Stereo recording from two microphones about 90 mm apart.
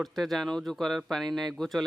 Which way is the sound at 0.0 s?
Centre (ahead or behind).